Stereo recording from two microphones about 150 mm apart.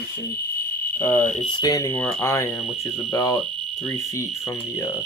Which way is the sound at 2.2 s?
20° left (ahead or behind).